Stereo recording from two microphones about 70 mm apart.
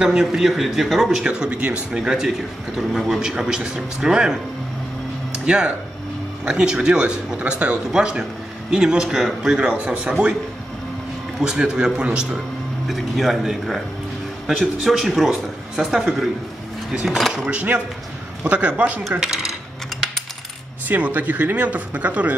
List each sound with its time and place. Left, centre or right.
0.0 s speech: centre
1.2 s speech: centre
5.4 s speech: centre
11.3 s speech: centre
12.8 s speech: centre
17.5 s speech: centre
19.1 s speech: centre
20.9 s speech: right